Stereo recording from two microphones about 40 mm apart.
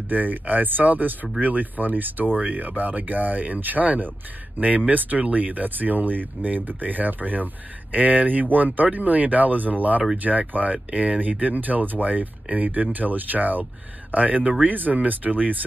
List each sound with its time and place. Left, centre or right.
0.1 s speech: right